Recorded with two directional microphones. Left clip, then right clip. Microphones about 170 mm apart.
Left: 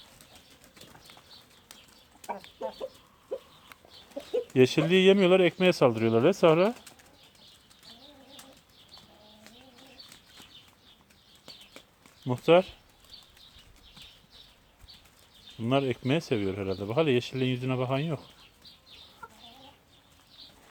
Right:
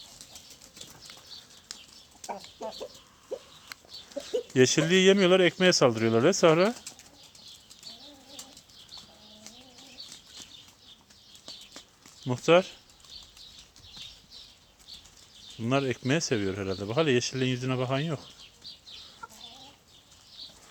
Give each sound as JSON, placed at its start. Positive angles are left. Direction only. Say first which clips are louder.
{"t": 4.5, "sound": "speech", "louder": "even", "side_deg": 10}
{"t": 12.2, "sound": "speech", "louder": "even", "side_deg": 10}
{"t": 15.6, "sound": "speech", "louder": "even", "side_deg": 10}
{"t": 19.2, "sound": "chicken", "louder": "right 1 dB", "side_deg": 45}